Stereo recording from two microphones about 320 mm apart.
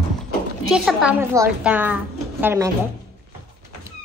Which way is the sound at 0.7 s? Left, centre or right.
Centre.